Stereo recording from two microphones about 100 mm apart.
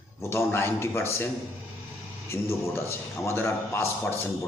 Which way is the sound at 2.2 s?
25° left (ahead or behind).